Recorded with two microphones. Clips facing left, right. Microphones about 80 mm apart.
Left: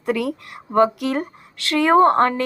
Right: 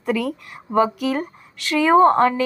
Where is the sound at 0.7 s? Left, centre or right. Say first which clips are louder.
Left 1 dB; left.